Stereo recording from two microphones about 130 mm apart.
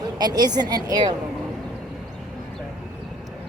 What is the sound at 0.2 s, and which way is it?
Speech, 30° right (ahead or behind).